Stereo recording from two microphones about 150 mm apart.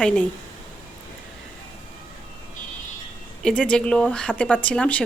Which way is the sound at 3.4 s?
5° left (ahead or behind).